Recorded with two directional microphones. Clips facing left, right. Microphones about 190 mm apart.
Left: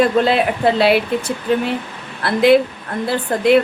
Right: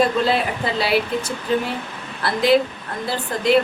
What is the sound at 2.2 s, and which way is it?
Speech, 60° left (ahead or behind).